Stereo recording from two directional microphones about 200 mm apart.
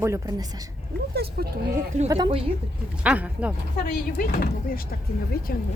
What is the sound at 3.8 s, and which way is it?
Speech, 45° left (ahead or behind).